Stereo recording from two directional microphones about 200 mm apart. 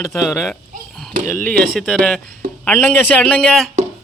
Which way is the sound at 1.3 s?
5° left (ahead or behind).